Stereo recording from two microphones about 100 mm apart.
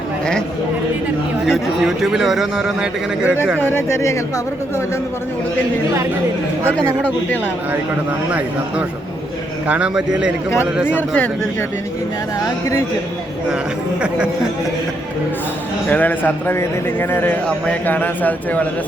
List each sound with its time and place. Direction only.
1.5 s a man's voice: 5° right (ahead or behind)
3.6 s a man's voice: 25° left (ahead or behind)
9.6 s a man's voice: 10° right (ahead or behind)
10.8 s a man's voice: 20° left (ahead or behind)
12.4 s speech: 30° left (ahead or behind)
15.9 s a man's voice: 20° left (ahead or behind)